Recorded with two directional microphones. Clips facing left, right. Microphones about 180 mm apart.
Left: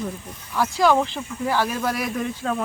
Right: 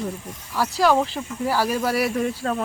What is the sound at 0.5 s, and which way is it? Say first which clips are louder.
Speech: even; 5° right (ahead or behind).